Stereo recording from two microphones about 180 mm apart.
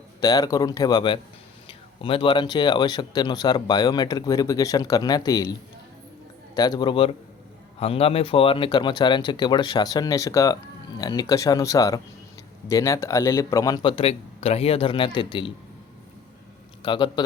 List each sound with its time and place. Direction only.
0.2 s speech: 20° left (ahead or behind)
16.8 s speech: 25° left (ahead or behind)